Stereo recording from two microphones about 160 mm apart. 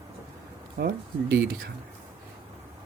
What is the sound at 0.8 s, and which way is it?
Speech, 90° right.